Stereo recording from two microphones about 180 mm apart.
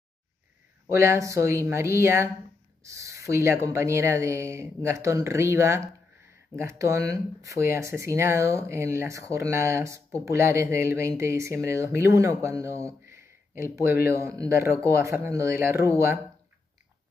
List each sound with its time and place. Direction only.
0.8 s speech: 15° right (ahead or behind)